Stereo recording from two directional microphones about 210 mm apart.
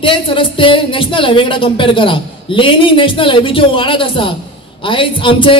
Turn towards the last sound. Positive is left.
turn(degrees=25)  # may be behind; listen again after turning